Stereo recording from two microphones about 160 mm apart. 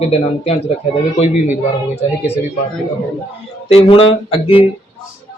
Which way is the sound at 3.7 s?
35° left (ahead or behind).